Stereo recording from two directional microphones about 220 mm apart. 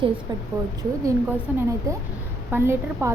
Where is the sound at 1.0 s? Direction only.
10° right (ahead or behind).